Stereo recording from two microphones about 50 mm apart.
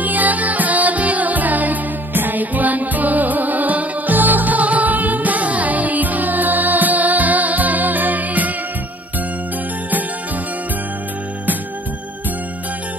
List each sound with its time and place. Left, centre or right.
0.0 s music: right